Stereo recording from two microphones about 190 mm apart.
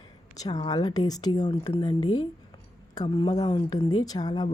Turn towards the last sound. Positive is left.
turn(degrees=20)  # may be behind; listen again after turning